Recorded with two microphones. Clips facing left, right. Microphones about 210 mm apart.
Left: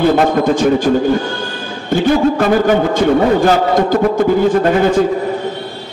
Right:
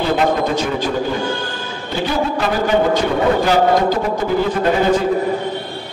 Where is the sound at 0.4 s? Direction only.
50° left (ahead or behind).